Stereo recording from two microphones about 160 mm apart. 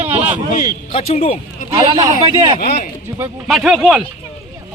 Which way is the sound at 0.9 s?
40° left (ahead or behind).